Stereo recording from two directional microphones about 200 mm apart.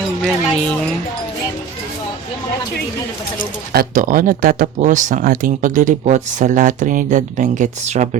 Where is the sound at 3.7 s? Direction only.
40° right (ahead or behind).